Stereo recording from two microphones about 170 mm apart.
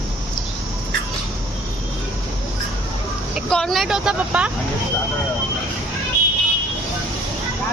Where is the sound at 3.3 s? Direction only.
5° left (ahead or behind).